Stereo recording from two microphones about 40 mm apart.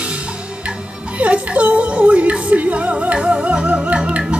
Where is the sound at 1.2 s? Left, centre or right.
Right.